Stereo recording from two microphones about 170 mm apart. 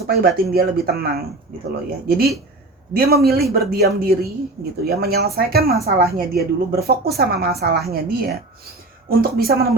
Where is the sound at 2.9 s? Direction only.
65° right (ahead or behind).